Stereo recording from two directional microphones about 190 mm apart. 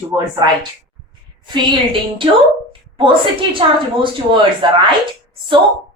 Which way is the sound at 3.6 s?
25° right (ahead or behind).